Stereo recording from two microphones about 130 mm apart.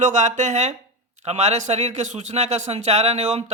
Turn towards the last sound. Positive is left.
turn(degrees=-55)  # may be behind; listen again after turning